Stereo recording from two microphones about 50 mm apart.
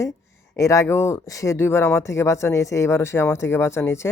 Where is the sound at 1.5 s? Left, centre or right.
Left.